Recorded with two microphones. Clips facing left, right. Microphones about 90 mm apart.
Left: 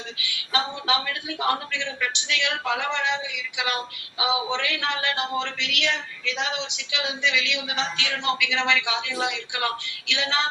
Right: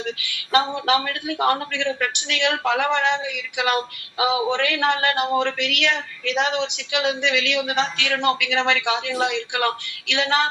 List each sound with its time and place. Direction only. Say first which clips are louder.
0.0 s a man's voice: right 6 dB; 55° right (ahead or behind)